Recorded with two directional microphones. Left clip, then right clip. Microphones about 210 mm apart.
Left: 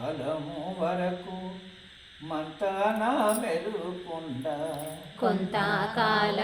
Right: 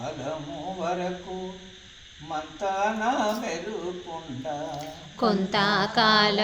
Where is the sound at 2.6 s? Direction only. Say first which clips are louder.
Right 1 dB; 5° right (ahead or behind).